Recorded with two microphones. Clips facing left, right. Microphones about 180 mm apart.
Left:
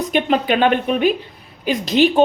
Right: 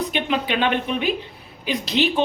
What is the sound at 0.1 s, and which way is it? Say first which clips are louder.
Speech: left 6 dB; 45° left (ahead or behind).